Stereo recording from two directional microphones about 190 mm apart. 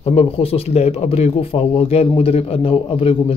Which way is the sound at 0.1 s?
30° left (ahead or behind).